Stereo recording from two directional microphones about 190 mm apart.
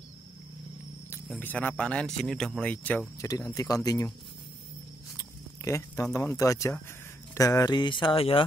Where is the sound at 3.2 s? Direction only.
20° left (ahead or behind).